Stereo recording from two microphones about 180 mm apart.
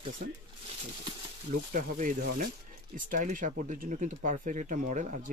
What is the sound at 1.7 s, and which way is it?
Speech, 45° right (ahead or behind).